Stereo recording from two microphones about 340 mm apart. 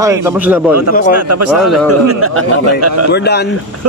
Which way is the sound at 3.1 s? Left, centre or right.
Left.